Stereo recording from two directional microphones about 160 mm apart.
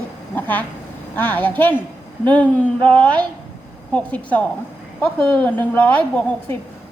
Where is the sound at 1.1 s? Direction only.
10° left (ahead or behind).